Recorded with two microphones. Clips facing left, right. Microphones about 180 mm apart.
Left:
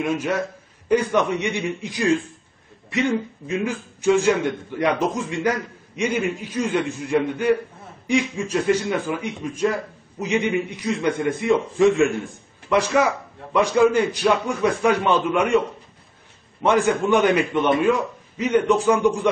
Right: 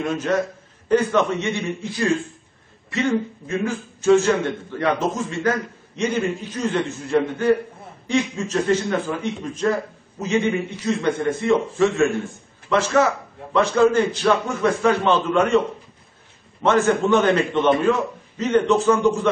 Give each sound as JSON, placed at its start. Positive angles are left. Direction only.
{"t": 0.0, "sound": "a man's voice", "side_deg": 10}
{"t": 16.6, "sound": "a man's voice", "side_deg": 15}